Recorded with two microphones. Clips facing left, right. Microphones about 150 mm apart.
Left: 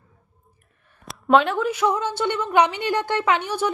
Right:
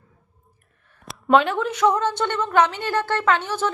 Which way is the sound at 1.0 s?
Centre (ahead or behind).